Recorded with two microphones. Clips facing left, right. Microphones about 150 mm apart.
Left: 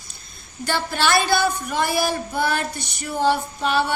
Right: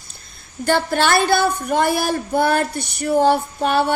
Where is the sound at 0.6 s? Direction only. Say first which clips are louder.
Right 5 dB; 55° right (ahead or behind).